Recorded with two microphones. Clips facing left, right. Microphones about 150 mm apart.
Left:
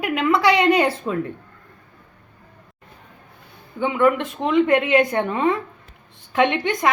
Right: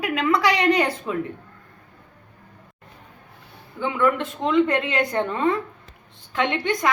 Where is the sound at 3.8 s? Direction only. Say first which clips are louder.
Left 3 dB; 15° left (ahead or behind).